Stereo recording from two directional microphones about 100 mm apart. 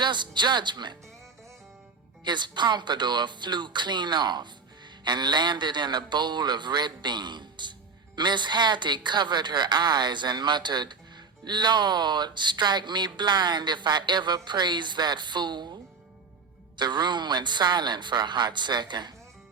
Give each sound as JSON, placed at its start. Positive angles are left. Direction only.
{"t": 0.0, "sound": "speech", "side_deg": -50}
{"t": 2.2, "sound": "speech", "side_deg": -50}